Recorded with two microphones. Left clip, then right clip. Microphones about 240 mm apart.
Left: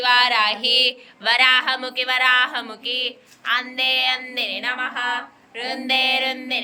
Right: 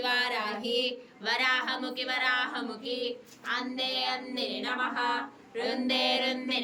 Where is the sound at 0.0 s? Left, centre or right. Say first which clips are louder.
Left 13 dB; centre.